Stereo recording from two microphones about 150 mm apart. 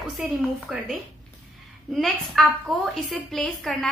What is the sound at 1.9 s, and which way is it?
A woman's voice, centre (ahead or behind).